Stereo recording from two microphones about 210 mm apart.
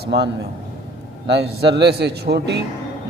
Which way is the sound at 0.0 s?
50° right (ahead or behind).